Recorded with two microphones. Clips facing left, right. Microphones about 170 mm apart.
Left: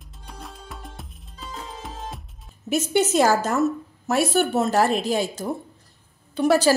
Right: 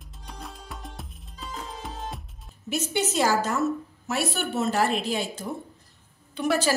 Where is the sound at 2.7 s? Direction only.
50° left (ahead or behind).